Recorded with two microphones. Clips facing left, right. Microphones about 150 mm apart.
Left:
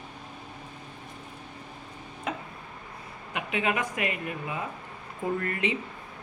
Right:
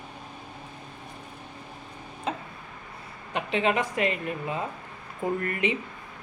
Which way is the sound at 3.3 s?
30° right (ahead or behind).